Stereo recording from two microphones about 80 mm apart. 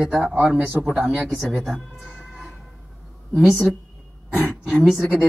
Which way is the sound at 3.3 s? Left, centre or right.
Centre.